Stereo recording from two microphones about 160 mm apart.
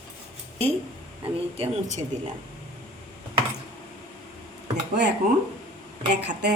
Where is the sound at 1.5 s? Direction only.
40° right (ahead or behind).